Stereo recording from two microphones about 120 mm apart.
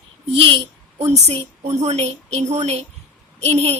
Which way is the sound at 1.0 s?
60° right (ahead or behind).